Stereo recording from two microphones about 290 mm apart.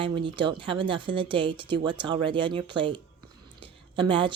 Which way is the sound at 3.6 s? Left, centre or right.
Centre.